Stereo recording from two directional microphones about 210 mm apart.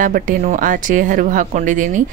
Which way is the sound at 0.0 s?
40° right (ahead or behind).